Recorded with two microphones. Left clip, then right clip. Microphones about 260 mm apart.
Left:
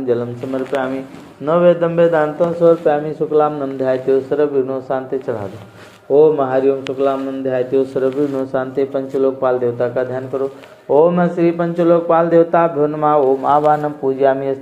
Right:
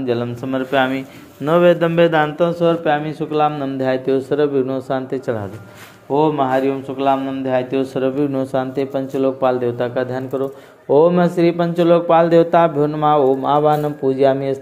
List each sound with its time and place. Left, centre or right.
0.0 s a man's voice: right